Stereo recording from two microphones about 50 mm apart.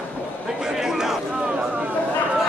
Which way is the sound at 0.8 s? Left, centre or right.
Centre.